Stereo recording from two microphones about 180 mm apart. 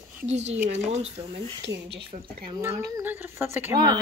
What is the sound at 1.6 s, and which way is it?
Speech, 70° right (ahead or behind).